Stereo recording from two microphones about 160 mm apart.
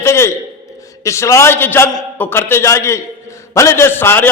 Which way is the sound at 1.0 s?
20° left (ahead or behind).